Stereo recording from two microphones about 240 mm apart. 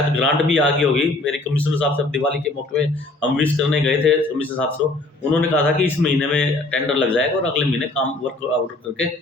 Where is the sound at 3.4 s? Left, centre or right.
Centre.